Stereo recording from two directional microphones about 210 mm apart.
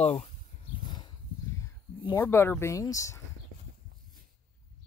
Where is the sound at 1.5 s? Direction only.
15° left (ahead or behind).